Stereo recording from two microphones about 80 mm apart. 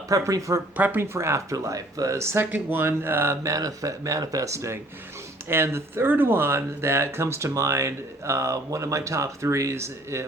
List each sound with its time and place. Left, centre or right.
0.1 s speech: right
0.8 s speech: right
3.5 s speech: right